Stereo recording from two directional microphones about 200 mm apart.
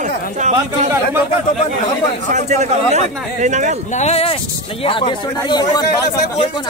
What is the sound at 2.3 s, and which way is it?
Speech, 35° right (ahead or behind).